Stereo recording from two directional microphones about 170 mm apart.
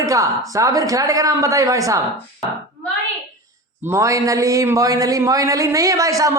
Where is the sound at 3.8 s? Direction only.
15° right (ahead or behind).